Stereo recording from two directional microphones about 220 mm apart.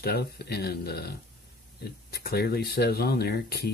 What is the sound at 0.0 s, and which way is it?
Speech, 45° left (ahead or behind).